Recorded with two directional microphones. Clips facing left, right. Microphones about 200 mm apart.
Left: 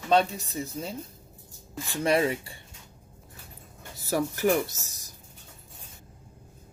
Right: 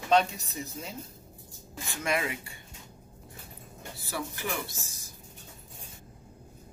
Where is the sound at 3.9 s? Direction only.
40° left (ahead or behind).